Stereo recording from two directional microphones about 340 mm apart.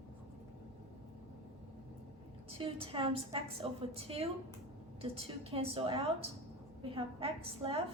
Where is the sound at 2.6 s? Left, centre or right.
Centre.